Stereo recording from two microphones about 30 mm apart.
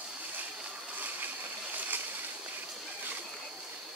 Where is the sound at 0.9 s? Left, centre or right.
Right.